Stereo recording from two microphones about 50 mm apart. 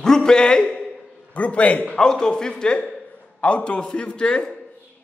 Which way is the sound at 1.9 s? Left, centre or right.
Centre.